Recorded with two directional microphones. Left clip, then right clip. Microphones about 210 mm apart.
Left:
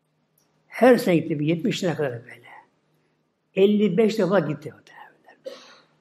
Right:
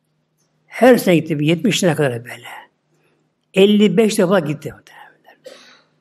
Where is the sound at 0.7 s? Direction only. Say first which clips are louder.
Right 5 dB; 5° right (ahead or behind).